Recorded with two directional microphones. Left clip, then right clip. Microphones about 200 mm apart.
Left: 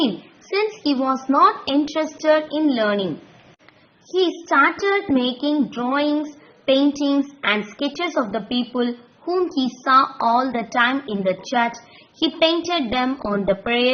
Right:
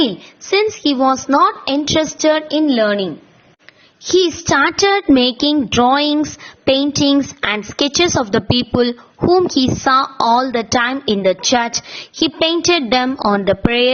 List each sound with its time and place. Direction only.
0.5 s a woman's voice: 40° right (ahead or behind)
4.2 s a woman's voice: 50° right (ahead or behind)